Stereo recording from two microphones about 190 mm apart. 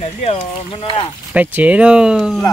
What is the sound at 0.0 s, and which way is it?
Speech, 30° left (ahead or behind).